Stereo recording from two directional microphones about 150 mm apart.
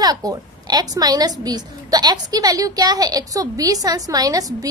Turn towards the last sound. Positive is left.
turn(degrees=-25)  # may be behind; listen again after turning